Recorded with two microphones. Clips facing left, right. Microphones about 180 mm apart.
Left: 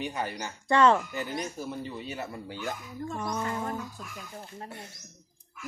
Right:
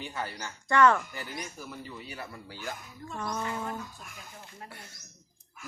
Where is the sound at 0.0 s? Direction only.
20° left (ahead or behind).